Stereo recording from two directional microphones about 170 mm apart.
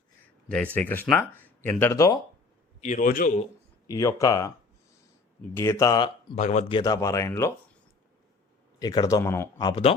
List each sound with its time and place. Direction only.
0.4 s speech: 10° left (ahead or behind)
2.8 s a man's voice: 50° left (ahead or behind)
3.8 s speech: 20° left (ahead or behind)
5.5 s speech: 15° left (ahead or behind)
6.3 s a man's voice: 45° left (ahead or behind)
6.7 s speech: 25° left (ahead or behind)
8.8 s speech: 20° left (ahead or behind)
9.6 s speech: 25° left (ahead or behind)